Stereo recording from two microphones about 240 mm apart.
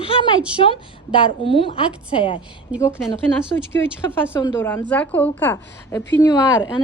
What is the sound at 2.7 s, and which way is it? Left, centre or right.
Speech, centre.